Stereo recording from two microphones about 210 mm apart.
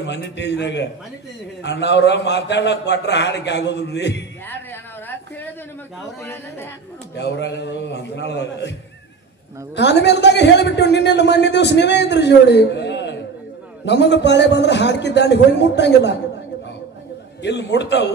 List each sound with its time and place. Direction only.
0.0 s a man's voice: 55° left (ahead or behind)
4.5 s a sound: 10° left (ahead or behind)
6.2 s a woman's voice: 10° left (ahead or behind)
7.2 s a man's voice: 55° left (ahead or behind)
9.8 s a man's voice: 55° left (ahead or behind)
17.4 s a man's voice: 55° left (ahead or behind)